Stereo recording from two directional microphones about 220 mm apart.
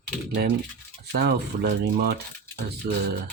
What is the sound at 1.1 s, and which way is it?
Speech, 45° right (ahead or behind).